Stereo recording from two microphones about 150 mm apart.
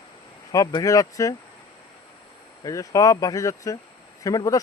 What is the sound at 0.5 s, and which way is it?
Speech, 25° left (ahead or behind).